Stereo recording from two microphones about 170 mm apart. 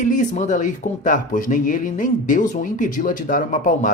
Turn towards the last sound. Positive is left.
turn(degrees=50)  # may be behind; listen again after turning